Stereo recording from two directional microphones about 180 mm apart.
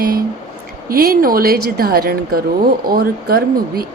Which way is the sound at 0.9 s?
55° right (ahead or behind).